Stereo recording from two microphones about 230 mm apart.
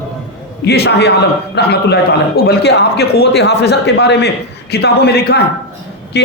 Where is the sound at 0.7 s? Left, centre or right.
Left.